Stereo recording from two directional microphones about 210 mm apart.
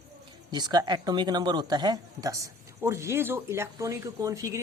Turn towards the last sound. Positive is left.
turn(degrees=-15)  # may be behind; listen again after turning